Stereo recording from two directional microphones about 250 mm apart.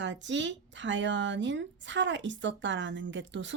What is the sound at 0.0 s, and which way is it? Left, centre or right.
A woman's voice, right.